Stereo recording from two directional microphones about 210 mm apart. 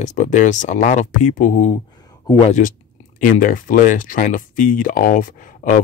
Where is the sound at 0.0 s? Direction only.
35° left (ahead or behind).